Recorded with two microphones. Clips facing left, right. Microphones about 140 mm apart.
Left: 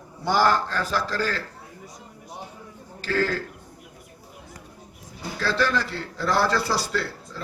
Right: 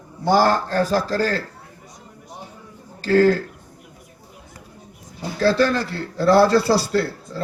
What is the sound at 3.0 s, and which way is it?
Speech, 45° right (ahead or behind).